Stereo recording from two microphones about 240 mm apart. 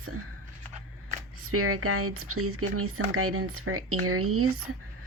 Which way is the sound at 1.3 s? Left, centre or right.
Right.